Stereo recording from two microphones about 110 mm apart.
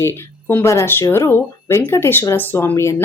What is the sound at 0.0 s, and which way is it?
A woman's voice, 20° left (ahead or behind).